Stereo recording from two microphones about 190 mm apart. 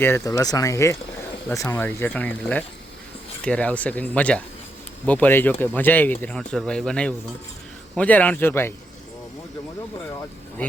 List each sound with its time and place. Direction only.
0.0 s speech: 15° left (ahead or behind)
10.6 s speech: 5° left (ahead or behind)